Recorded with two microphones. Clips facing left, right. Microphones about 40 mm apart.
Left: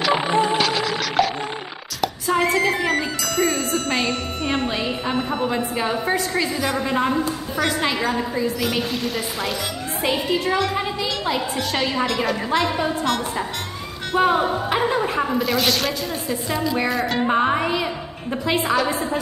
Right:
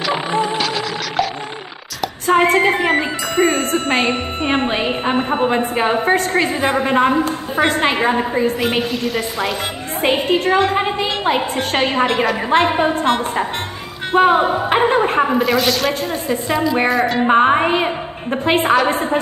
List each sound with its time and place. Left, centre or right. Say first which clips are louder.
0.1 s music: even; centre
2.2 s a woman's voice: right 6 dB; right
8.9 s a woman's voice: right 4 dB; centre
10.0 s a woman's voice: right 6 dB; right
15.4 s a woman's voice: right 4 dB; centre
16.3 s a woman's voice: right 7 dB; centre
16.9 s a woman's voice: right 6 dB; centre
17.2 s speech: right 6 dB; right